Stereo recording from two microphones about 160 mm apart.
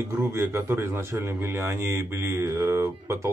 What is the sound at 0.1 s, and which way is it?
Speech, 15° right (ahead or behind).